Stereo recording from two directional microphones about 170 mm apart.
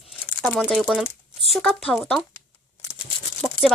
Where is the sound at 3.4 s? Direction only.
Centre (ahead or behind).